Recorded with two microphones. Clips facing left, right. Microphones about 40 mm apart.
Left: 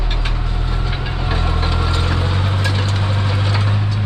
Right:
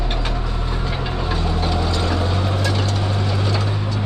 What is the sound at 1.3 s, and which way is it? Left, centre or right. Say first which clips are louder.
Vehicle: left 2 dB; left.